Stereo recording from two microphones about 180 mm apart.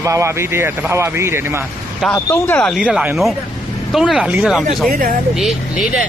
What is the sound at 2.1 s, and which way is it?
Speech, 15° left (ahead or behind).